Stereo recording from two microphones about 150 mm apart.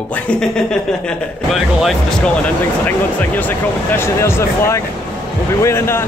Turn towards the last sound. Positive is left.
turn(degrees=15)  # may be behind; listen again after turning